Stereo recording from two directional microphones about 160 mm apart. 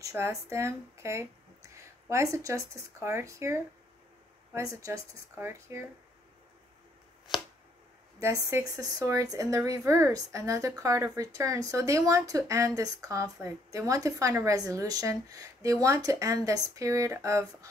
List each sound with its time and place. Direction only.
0.0 s speech: 20° right (ahead or behind)
8.2 s speech: 20° right (ahead or behind)